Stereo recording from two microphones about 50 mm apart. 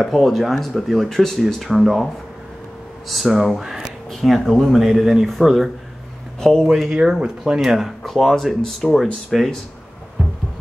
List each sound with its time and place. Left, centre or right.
0.0 s speech: centre
3.1 s speech: centre
4.1 s speech: centre
4.7 s speech: centre
7.0 s speech: centre
8.0 s speech: centre